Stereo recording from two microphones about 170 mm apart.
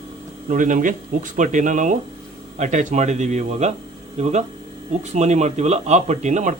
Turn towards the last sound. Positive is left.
turn(degrees=-45)  # may be behind; listen again after turning